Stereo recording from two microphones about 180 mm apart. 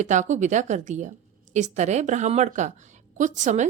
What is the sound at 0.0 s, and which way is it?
A woman's voice, 40° right (ahead or behind).